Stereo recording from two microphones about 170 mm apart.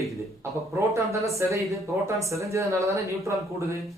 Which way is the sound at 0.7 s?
15° right (ahead or behind).